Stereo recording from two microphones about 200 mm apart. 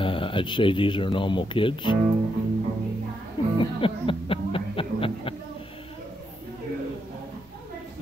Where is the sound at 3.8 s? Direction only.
25° left (ahead or behind).